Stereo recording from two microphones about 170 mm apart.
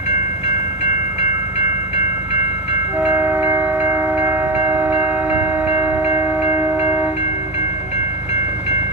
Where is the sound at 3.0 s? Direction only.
10° right (ahead or behind).